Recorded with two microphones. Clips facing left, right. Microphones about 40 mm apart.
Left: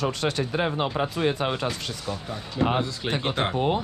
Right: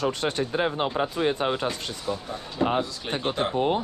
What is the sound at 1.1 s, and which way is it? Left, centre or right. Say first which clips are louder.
Speech: even; left.